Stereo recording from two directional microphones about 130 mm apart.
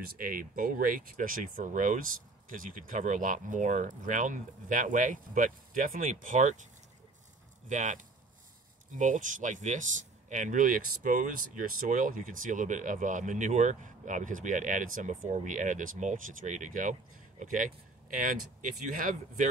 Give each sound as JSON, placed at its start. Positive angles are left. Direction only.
{"t": 0.2, "sound": "speech", "side_deg": -90}